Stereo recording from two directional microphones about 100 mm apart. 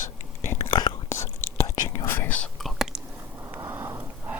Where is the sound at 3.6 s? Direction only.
35° right (ahead or behind).